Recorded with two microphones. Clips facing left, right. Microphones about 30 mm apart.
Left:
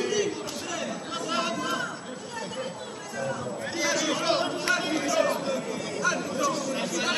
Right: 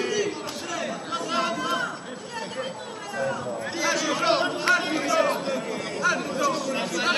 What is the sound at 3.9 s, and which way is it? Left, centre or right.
Chatter, centre.